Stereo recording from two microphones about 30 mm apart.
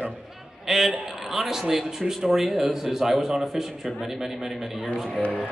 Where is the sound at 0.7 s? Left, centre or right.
Centre.